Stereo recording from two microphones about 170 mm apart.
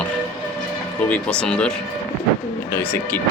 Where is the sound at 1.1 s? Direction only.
5° left (ahead or behind).